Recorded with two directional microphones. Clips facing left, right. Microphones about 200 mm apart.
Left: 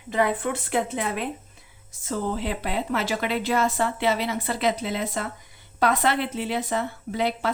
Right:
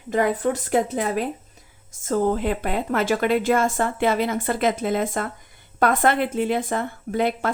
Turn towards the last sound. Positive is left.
turn(degrees=-50)  # may be behind; listen again after turning